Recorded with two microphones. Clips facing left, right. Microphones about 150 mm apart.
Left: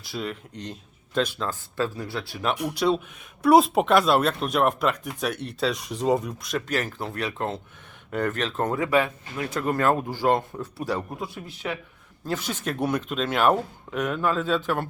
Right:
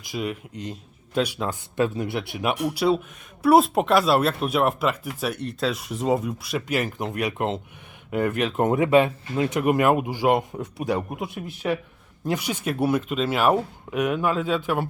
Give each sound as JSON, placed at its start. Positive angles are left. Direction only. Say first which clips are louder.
{"t": 0.0, "sound": "speech", "louder": "right 3 dB", "side_deg": -10}